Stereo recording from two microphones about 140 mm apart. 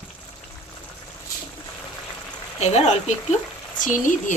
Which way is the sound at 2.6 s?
50° left (ahead or behind).